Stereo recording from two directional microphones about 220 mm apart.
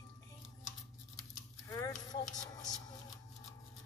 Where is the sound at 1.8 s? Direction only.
15° left (ahead or behind).